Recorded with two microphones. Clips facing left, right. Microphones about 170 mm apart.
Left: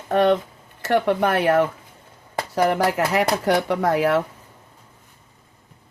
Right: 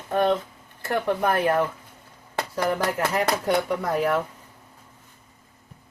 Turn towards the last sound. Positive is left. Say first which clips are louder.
# left 4 dB
turn(degrees=90)